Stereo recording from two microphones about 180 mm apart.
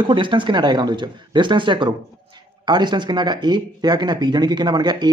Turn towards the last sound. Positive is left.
turn(degrees=-25)  # may be behind; listen again after turning